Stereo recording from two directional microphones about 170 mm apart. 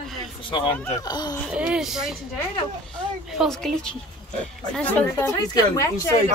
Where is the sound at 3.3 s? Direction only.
Centre (ahead or behind).